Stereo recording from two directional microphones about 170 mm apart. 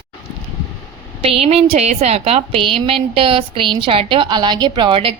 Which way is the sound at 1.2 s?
35° right (ahead or behind).